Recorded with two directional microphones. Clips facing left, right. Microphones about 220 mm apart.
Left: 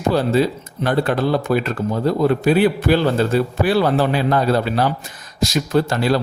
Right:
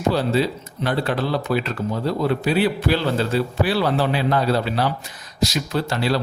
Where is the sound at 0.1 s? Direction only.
50° left (ahead or behind).